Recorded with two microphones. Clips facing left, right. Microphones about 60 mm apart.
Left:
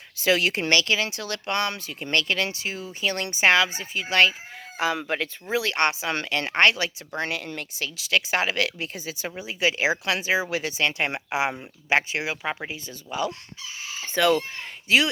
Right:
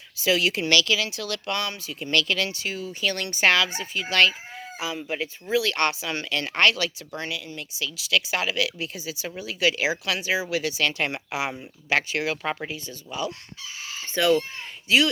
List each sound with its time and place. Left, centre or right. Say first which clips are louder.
0.2 s speech: left 1 dB; left
5.0 s speech: left 2 dB; left
5.5 s speech: even; left
7.2 s speech: left 4 dB; left
9.3 s speech: right 1 dB; left
12.7 s a man's voice: left 2 dB; left